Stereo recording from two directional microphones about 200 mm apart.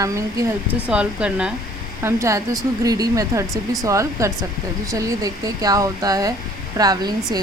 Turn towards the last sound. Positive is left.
turn(degrees=-20)  # may be behind; listen again after turning